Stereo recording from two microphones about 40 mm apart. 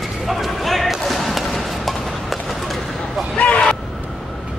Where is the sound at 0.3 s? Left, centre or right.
Centre.